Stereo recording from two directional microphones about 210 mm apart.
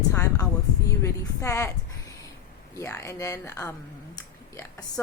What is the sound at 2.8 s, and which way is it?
A woman's voice, 15° left (ahead or behind).